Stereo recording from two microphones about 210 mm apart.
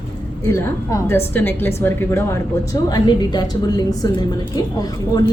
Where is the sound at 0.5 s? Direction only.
15° left (ahead or behind).